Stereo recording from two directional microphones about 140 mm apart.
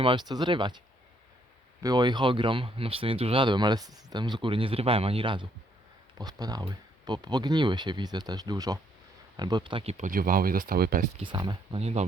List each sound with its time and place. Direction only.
0.0 s speech: 35° right (ahead or behind)
1.8 s speech: 30° right (ahead or behind)
10.0 s speech: 85° right
11.2 s speech: 35° right (ahead or behind)
11.8 s speech: 50° right (ahead or behind)